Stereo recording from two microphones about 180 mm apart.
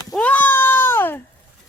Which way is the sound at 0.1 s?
10° left (ahead or behind).